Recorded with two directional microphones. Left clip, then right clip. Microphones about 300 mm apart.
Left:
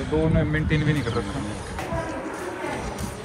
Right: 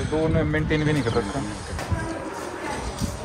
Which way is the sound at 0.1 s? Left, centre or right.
Centre.